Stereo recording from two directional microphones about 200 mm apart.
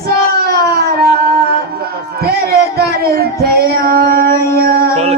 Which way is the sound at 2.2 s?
50° right (ahead or behind).